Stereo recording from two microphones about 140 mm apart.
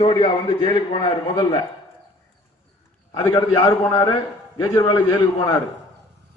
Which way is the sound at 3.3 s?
30° left (ahead or behind).